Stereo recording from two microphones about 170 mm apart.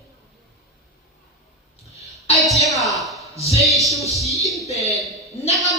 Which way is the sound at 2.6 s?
Centre (ahead or behind).